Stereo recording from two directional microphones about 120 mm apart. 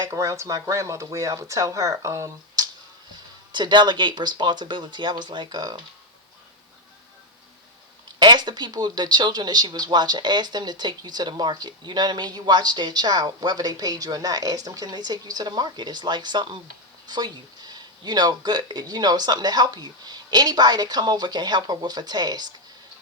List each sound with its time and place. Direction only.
0.0 s speech: 25° right (ahead or behind)
3.5 s speech: 40° right (ahead or behind)
8.2 s speech: 35° right (ahead or behind)